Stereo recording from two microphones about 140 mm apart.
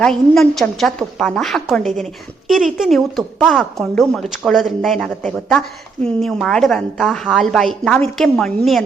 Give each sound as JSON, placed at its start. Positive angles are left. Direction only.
{"t": 0.0, "sound": "a woman's voice", "side_deg": 5}